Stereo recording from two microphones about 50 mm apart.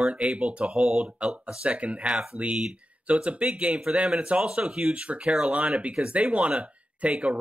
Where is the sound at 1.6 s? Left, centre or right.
Right.